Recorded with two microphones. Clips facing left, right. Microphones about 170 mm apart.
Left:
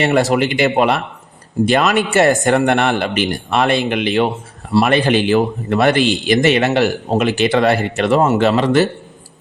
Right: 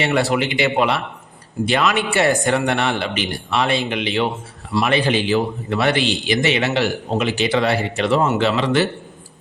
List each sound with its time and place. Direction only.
0.0 s speech: 45° left (ahead or behind)